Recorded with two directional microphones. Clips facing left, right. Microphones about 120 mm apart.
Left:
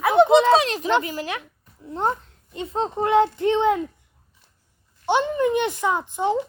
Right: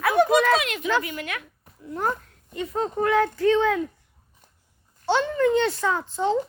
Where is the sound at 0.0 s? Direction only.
20° left (ahead or behind).